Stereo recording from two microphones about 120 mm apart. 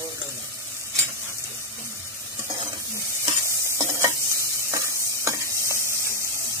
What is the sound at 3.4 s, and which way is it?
Stir, 25° right (ahead or behind).